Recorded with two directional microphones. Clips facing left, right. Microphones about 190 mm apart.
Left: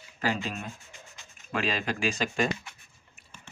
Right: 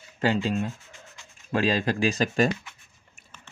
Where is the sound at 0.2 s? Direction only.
30° right (ahead or behind).